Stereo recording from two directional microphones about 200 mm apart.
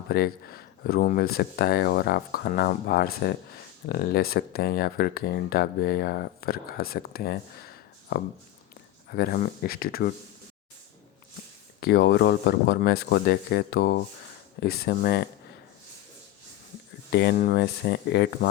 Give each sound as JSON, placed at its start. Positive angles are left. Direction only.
{"t": 0.1, "sound": "speech", "side_deg": 50}
{"t": 11.8, "sound": "speech", "side_deg": 55}
{"t": 17.1, "sound": "speech", "side_deg": 55}